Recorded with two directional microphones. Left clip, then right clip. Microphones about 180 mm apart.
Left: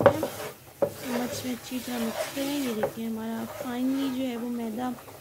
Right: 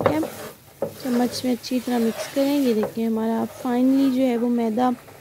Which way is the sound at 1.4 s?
25° right (ahead or behind).